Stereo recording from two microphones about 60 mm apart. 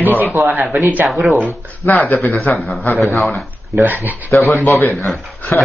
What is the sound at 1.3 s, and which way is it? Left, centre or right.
Speech, right.